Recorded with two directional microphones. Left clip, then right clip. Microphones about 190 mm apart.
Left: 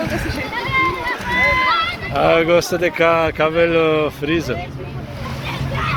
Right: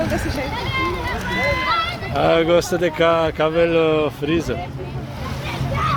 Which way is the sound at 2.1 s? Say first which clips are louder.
Left 2 dB; centre (ahead or behind).